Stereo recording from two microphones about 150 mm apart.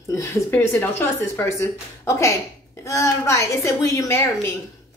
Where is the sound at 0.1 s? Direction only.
20° left (ahead or behind).